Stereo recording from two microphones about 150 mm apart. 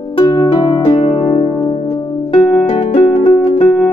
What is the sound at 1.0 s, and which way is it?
Music, 45° left (ahead or behind).